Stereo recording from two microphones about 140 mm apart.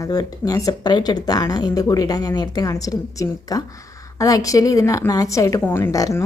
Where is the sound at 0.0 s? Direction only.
25° left (ahead or behind).